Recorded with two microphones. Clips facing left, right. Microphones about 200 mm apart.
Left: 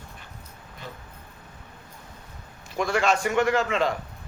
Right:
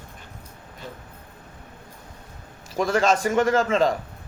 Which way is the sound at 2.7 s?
40° right (ahead or behind).